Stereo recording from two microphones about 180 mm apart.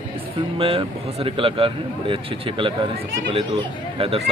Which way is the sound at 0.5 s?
30° right (ahead or behind).